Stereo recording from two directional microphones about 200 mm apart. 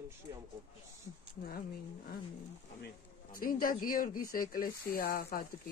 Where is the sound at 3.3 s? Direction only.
45° left (ahead or behind).